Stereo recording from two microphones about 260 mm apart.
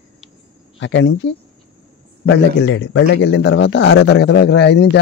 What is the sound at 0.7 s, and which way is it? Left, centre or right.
A man's voice, left.